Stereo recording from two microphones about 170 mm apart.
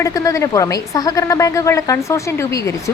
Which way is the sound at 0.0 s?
20° left (ahead or behind).